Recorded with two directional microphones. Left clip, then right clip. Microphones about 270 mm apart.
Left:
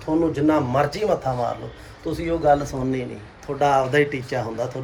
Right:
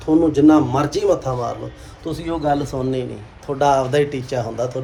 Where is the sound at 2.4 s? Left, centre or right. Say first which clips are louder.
Left 2 dB; centre.